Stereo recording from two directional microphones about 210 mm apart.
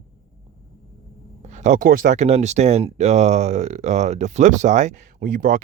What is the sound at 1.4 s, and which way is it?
Speech, 35° right (ahead or behind).